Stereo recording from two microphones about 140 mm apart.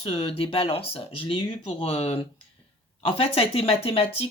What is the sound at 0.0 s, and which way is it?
Speech, 40° left (ahead or behind).